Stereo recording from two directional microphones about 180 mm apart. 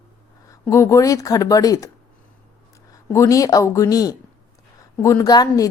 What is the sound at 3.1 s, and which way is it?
A woman's voice, 15° left (ahead or behind).